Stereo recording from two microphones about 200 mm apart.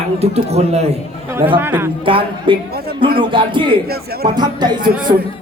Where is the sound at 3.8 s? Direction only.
50° right (ahead or behind).